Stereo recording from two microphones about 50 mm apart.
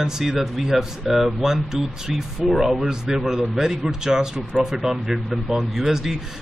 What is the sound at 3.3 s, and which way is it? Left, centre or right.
A man's voice, right.